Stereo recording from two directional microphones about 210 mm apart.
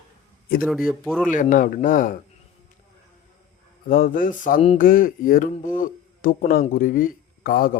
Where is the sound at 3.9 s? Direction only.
40° left (ahead or behind).